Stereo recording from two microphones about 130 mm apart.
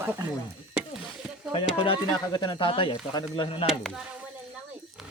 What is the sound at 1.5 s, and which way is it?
Speech, 45° left (ahead or behind).